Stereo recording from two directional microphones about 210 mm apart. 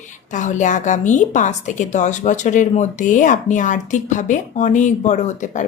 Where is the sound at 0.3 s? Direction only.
35° left (ahead or behind).